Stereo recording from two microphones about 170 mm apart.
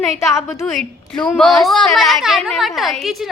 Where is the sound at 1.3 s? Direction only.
5° left (ahead or behind).